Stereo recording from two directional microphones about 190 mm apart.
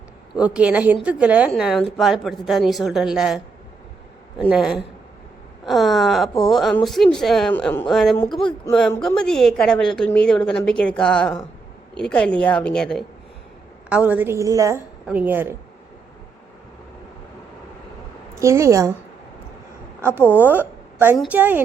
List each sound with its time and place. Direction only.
0.3 s a woman's voice: 5° right (ahead or behind)
8.3 s speech: 25° left (ahead or behind)
9.0 s a woman's voice: 5° left (ahead or behind)
13.9 s a woman's voice: 10° right (ahead or behind)
18.3 s a woman's voice: 15° right (ahead or behind)
20.0 s a woman's voice: 10° right (ahead or behind)